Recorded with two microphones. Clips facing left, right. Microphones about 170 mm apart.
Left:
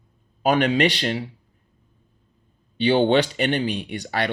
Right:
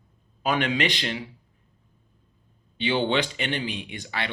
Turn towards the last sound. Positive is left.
turn(degrees=45)  # may be behind; listen again after turning